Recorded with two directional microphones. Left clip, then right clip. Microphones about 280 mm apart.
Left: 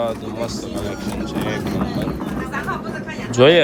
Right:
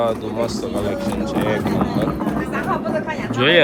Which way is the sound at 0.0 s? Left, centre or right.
Centre.